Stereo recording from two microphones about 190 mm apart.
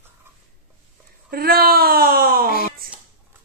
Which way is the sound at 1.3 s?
50° right (ahead or behind).